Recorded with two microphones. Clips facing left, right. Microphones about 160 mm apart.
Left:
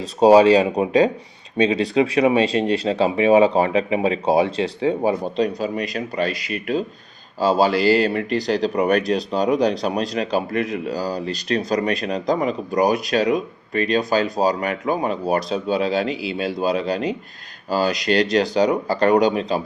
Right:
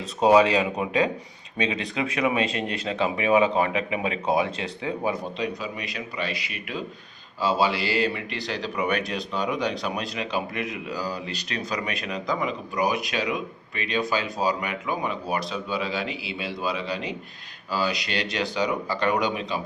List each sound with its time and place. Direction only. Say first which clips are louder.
0.0 s speech: left 6 dB; 35° left (ahead or behind)